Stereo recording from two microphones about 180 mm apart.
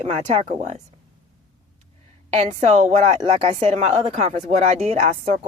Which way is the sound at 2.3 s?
35° right (ahead or behind).